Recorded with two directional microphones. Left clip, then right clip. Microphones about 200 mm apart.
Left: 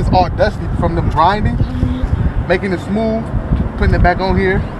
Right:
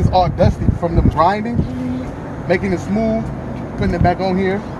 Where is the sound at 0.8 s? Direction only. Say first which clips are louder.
Left 2 dB; 25° right (ahead or behind).